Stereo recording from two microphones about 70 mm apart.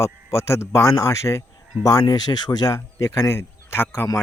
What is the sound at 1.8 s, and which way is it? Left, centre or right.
Speech, left.